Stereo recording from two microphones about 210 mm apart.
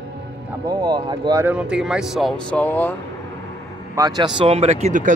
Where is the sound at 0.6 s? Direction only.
20° right (ahead or behind).